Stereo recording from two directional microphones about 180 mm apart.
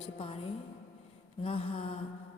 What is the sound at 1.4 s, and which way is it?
Speech, 30° left (ahead or behind).